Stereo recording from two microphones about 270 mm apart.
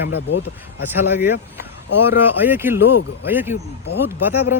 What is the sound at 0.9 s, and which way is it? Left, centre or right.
Speech, centre.